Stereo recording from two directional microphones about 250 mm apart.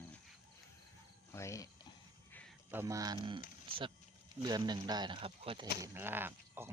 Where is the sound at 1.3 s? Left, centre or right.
Centre.